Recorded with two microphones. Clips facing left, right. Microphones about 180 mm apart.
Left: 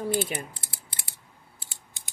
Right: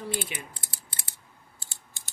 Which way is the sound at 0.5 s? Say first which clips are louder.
Left 1 dB; 25° left (ahead or behind).